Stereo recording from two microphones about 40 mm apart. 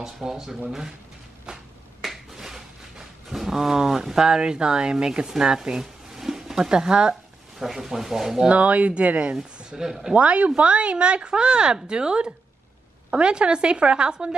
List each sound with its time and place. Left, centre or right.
0.0 s speech: centre
1.5 s a sound: centre
6.7 s a woman's voice: centre
7.5 s speech: centre
8.5 s speech: right
9.4 s speech: centre
10.1 s a woman's voice: right